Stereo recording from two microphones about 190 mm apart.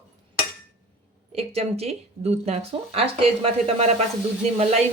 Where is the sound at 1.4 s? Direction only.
35° right (ahead or behind).